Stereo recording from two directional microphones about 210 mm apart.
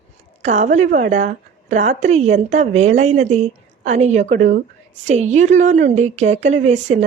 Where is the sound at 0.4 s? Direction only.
35° right (ahead or behind).